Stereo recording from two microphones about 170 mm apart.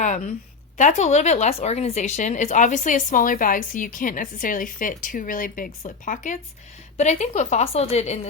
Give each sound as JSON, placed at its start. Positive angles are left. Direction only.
{"t": 0.8, "sound": "a woman's voice", "side_deg": 45}